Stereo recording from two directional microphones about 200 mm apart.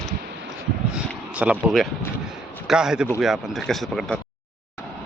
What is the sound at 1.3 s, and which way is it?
Speech, 5° right (ahead or behind).